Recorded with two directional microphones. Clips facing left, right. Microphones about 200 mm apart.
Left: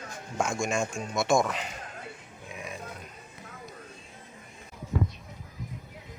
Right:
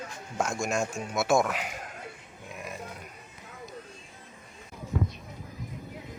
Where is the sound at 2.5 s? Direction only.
Centre (ahead or behind).